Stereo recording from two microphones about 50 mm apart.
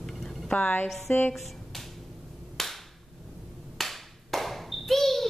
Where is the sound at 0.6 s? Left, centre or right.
Left.